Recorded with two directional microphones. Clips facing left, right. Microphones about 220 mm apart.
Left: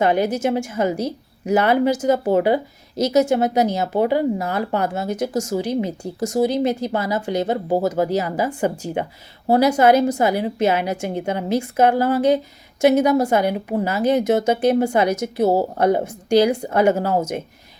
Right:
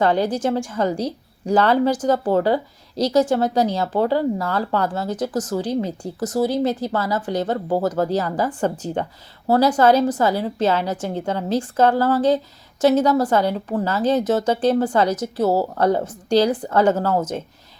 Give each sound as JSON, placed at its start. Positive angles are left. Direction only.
{"t": 0.0, "sound": "a woman's voice", "side_deg": 20}
{"t": 0.3, "sound": "a woman's voice", "side_deg": 10}